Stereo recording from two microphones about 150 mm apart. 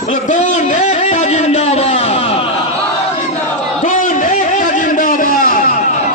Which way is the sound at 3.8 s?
60° left (ahead or behind).